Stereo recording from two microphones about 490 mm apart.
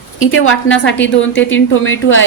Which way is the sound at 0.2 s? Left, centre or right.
Left.